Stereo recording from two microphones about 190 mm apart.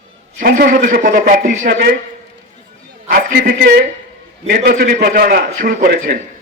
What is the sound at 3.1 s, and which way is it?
A man's voice, 55° right (ahead or behind).